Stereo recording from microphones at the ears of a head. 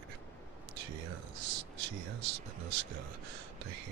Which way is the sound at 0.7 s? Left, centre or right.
Right.